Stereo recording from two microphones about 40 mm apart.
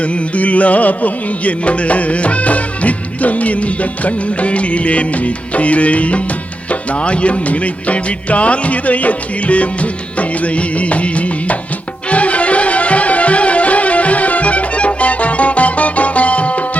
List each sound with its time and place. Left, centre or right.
0.0 s music: left